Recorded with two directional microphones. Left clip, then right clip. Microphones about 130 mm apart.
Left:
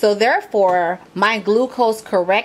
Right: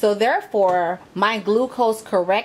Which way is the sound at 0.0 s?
10° left (ahead or behind).